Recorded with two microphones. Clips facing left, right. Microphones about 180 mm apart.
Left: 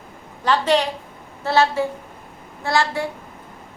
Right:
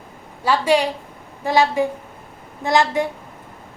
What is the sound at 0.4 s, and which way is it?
A woman's voice, 10° right (ahead or behind).